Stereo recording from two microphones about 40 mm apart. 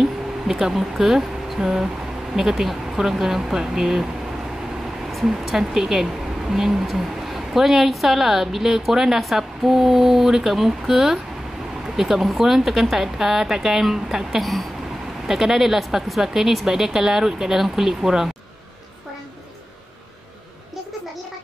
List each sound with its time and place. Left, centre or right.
0.0 s a woman's voice: centre
5.2 s a woman's voice: centre
14.4 s speech: centre
15.2 s a woman's voice: centre